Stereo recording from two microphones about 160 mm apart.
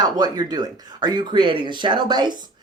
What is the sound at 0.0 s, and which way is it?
Speech, 25° right (ahead or behind).